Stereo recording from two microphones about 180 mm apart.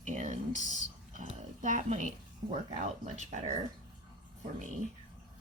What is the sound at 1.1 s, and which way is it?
Speech, 45° right (ahead or behind).